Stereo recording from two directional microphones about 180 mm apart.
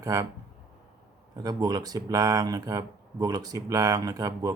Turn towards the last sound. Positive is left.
turn(degrees=-20)  # may be behind; listen again after turning